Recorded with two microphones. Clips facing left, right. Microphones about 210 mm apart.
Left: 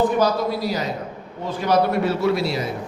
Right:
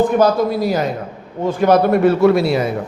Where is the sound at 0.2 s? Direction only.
50° right (ahead or behind).